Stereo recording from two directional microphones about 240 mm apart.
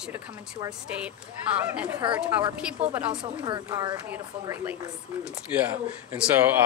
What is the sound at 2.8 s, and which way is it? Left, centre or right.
A woman's voice, right.